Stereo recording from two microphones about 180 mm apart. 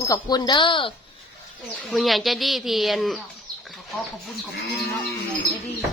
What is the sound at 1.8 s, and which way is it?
A woman's voice, centre (ahead or behind).